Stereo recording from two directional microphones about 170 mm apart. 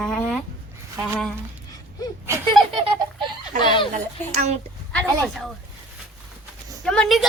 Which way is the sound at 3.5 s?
50° right (ahead or behind).